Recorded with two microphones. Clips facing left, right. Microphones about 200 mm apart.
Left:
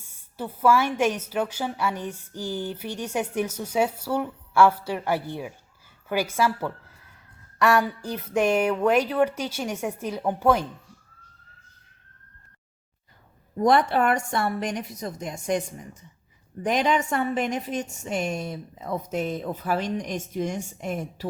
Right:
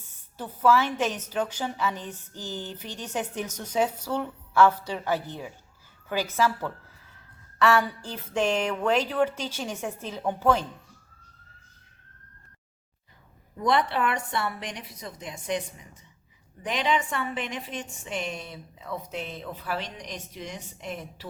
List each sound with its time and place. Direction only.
0.0 s a woman's voice: 10° left (ahead or behind)
13.6 s a woman's voice: 45° left (ahead or behind)